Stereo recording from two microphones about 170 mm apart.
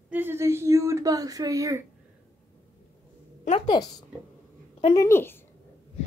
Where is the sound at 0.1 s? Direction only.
10° right (ahead or behind).